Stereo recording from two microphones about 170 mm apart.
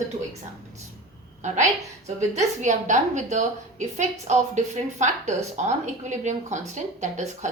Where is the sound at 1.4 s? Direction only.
45° right (ahead or behind).